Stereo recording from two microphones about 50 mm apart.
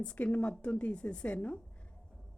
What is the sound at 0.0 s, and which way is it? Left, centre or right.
Speech, left.